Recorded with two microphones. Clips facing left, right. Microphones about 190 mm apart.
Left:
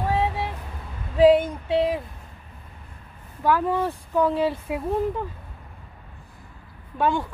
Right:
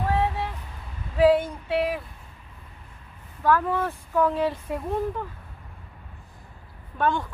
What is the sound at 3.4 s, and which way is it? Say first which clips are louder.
Speech: left 1 dB; 15° left (ahead or behind).